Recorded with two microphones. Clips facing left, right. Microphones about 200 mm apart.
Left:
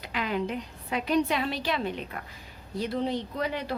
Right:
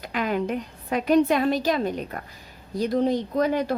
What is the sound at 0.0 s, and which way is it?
Speech, 45° right (ahead or behind).